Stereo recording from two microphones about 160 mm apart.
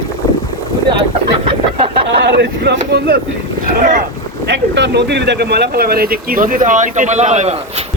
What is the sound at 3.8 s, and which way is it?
Speech, 50° right (ahead or behind).